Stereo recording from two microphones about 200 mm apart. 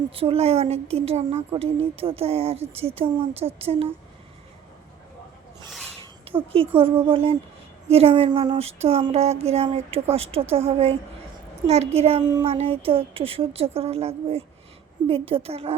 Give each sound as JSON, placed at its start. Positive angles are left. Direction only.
{"t": 0.1, "sound": "speech", "side_deg": -25}
{"t": 6.0, "sound": "a woman's voice", "side_deg": -25}
{"t": 12.3, "sound": "speech", "side_deg": -20}